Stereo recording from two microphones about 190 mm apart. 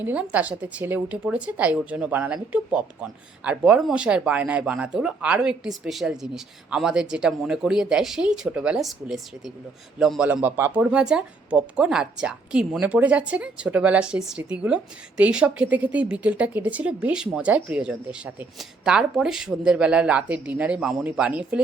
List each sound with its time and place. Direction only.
0.0 s speech: 10° right (ahead or behind)